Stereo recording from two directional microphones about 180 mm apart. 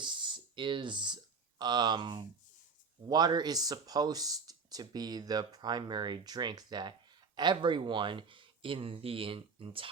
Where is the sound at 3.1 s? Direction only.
20° right (ahead or behind).